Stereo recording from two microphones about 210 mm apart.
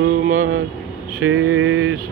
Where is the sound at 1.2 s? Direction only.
90° right.